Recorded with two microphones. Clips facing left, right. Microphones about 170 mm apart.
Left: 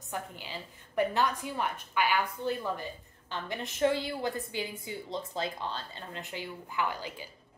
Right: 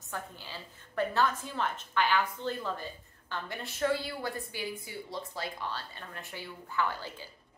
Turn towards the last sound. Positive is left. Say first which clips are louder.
# even
turn(degrees=15)  # may be behind; listen again after turning